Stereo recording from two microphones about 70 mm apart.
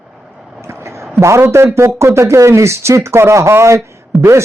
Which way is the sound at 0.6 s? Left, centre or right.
Right.